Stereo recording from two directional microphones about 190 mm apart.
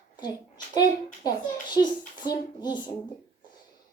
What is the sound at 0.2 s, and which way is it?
A woman's voice, 20° left (ahead or behind).